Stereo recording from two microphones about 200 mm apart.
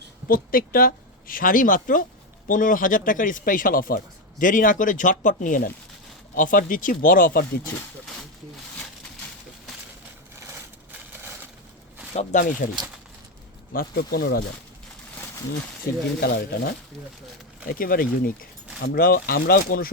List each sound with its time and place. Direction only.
0.3 s speech: 45° left (ahead or behind)
12.1 s speech: 40° left (ahead or behind)
13.7 s speech: 50° left (ahead or behind)
16.2 s speech: 50° left (ahead or behind)